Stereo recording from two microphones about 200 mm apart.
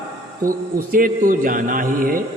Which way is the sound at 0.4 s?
45° right (ahead or behind).